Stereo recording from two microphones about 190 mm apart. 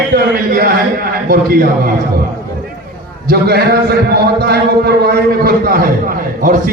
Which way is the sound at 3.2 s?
55° right (ahead or behind).